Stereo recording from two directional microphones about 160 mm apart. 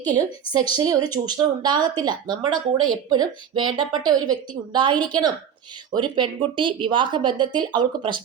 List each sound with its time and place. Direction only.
0.0 s speech: 25° right (ahead or behind)